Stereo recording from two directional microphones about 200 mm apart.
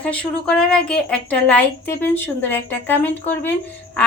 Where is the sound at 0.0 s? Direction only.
5° left (ahead or behind).